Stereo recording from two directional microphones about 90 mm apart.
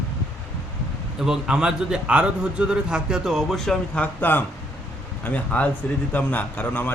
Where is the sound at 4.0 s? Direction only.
20° left (ahead or behind).